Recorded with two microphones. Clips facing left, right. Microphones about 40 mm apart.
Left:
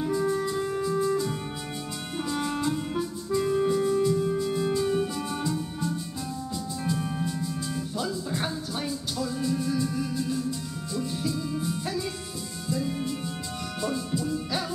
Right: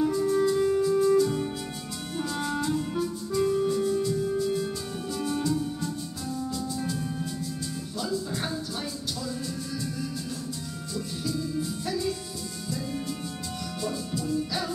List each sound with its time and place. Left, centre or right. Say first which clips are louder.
0.0 s music: right 3 dB; centre
6.8 s music: left 2 dB; left
7.3 s music: left 3 dB; centre
12.6 s music: left 4 dB; centre